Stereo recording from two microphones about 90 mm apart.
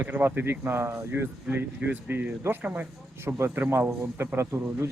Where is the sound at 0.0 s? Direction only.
25° right (ahead or behind).